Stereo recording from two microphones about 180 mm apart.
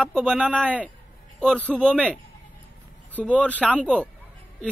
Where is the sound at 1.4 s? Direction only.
5° left (ahead or behind).